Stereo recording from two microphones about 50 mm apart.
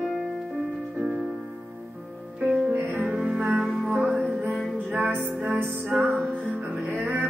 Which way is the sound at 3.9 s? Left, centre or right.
Right.